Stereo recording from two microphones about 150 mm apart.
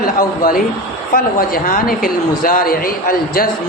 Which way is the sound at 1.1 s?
70° left (ahead or behind).